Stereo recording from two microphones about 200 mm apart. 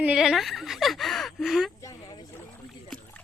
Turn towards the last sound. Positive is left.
turn(degrees=5)  # may be behind; listen again after turning